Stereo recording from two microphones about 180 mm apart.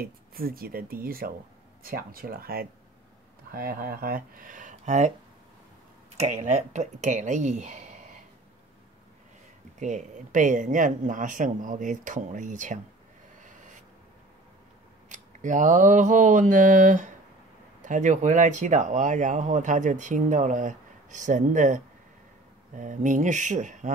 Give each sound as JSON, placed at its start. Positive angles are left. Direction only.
{"t": 0.0, "sound": "speech", "side_deg": -55}
{"t": 6.1, "sound": "speech", "side_deg": -40}
{"t": 9.8, "sound": "speech", "side_deg": -45}
{"t": 15.0, "sound": "speech", "side_deg": -45}